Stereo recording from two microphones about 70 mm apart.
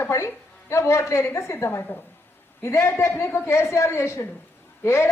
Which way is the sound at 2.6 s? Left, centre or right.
Left.